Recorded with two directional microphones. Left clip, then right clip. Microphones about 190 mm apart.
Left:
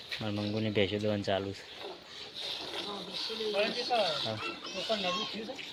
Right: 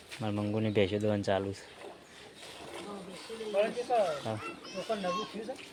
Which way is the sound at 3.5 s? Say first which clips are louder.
Right 2 dB; 35° right (ahead or behind).